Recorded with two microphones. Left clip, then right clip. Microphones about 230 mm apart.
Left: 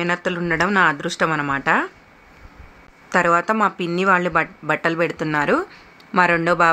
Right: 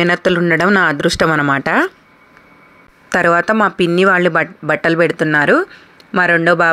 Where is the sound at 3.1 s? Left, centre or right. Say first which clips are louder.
Right 4 dB; right.